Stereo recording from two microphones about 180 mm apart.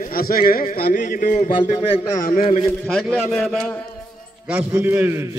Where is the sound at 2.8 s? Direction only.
5° left (ahead or behind).